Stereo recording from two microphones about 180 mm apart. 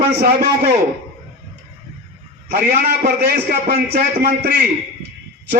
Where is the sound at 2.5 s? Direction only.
60° right (ahead or behind).